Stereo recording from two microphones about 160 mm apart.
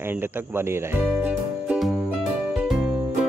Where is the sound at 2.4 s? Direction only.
5° right (ahead or behind).